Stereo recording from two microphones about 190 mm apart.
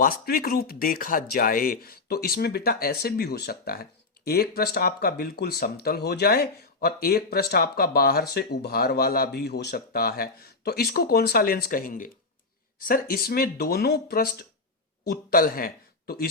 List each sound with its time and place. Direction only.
0.0 s speech: 50° left (ahead or behind)